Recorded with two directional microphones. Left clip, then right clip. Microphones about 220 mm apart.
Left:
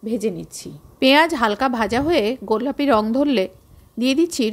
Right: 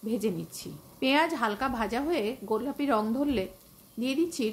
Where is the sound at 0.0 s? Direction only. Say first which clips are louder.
Left 7 dB; 25° left (ahead or behind).